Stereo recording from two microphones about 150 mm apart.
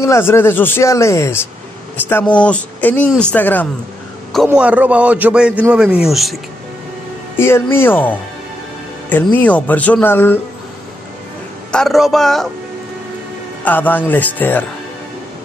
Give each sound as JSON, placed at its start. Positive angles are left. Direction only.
{"t": 0.0, "sound": "speech", "side_deg": 15}
{"t": 4.5, "sound": "a man's voice", "side_deg": -10}
{"t": 7.3, "sound": "speech", "side_deg": 15}
{"t": 9.1, "sound": "speech", "side_deg": 10}
{"t": 11.7, "sound": "a man's voice", "side_deg": 0}
{"t": 13.7, "sound": "speech", "side_deg": 10}